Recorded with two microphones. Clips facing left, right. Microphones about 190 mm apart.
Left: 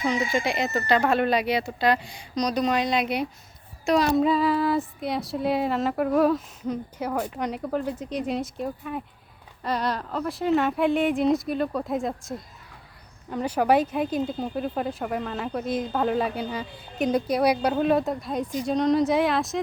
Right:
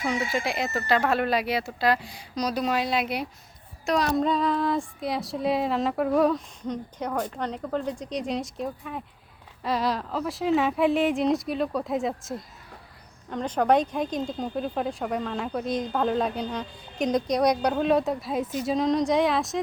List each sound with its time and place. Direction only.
0.3 s speech: centre (ahead or behind)